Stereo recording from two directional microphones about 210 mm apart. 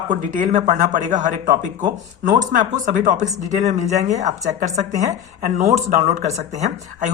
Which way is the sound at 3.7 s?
35° right (ahead or behind).